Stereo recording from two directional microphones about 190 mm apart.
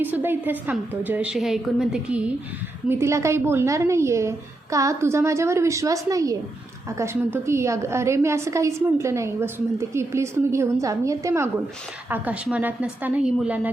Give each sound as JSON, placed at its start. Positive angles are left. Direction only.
{"t": 0.0, "sound": "a woman's voice", "side_deg": -10}